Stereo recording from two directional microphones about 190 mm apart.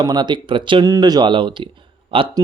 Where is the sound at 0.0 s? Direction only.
20° right (ahead or behind).